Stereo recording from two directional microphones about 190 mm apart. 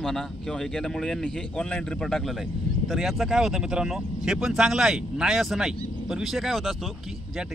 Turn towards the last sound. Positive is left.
turn(degrees=0)  # may be behind; listen again after turning